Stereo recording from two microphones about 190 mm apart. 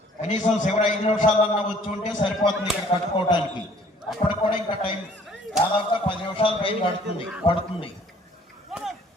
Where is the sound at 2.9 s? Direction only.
35° left (ahead or behind).